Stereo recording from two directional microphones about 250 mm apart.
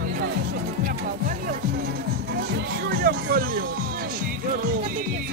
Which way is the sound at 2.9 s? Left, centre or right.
Right.